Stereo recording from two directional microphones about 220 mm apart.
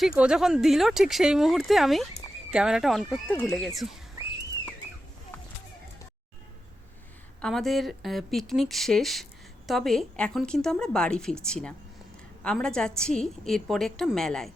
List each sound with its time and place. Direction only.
0.2 s a woman's voice: 5° right (ahead or behind)
7.4 s a woman's voice: centre (ahead or behind)